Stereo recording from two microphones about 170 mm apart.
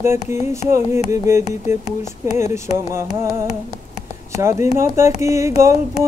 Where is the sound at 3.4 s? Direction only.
40° left (ahead or behind).